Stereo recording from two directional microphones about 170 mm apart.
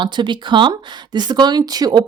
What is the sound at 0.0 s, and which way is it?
Speech, 25° right (ahead or behind).